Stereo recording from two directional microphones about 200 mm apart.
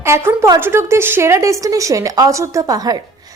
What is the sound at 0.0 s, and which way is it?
A woman's voice, 10° right (ahead or behind).